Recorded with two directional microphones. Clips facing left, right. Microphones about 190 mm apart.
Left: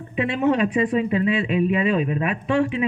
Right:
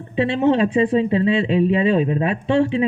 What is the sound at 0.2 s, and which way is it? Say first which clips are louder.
Speech: right 3 dB; 30° right (ahead or behind).